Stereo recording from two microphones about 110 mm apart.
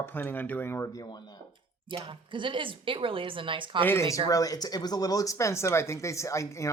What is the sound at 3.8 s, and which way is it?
Speech, 25° left (ahead or behind).